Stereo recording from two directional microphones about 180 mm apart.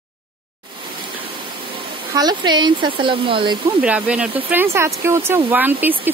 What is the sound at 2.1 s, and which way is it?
Speech, 25° right (ahead or behind).